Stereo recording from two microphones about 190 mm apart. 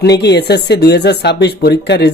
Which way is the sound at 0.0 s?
65° left (ahead or behind).